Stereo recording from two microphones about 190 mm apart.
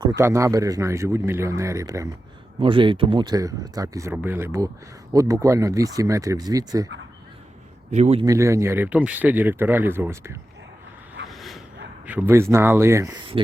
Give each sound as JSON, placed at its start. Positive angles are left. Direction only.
{"t": 0.2, "sound": "speech", "side_deg": -15}
{"t": 2.6, "sound": "speech", "side_deg": -25}
{"t": 7.9, "sound": "a man's voice", "side_deg": -35}
{"t": 8.2, "sound": "speech", "side_deg": -15}
{"t": 11.3, "sound": "bow-wow", "side_deg": 0}
{"t": 12.0, "sound": "speech", "side_deg": -10}